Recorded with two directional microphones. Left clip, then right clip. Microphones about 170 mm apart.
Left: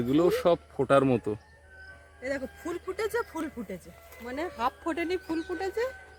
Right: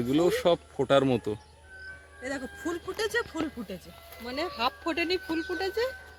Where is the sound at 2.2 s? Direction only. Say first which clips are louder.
Left 2 dB; 55° left (ahead or behind).